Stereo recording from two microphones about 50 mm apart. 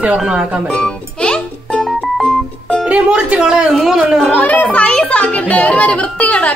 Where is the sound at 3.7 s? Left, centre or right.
Centre.